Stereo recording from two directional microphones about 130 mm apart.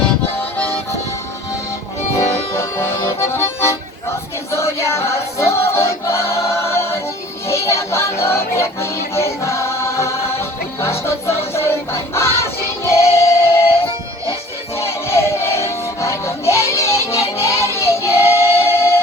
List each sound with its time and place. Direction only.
2.6 s accordion: 20° left (ahead or behind)
4.5 s music: 20° left (ahead or behind)
14.8 s music: 20° left (ahead or behind)